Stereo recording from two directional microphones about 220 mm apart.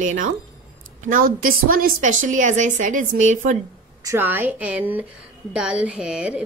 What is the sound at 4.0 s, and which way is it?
A woman's voice, 10° right (ahead or behind).